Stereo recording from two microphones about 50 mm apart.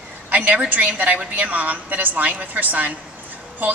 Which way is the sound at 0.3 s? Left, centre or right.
Right.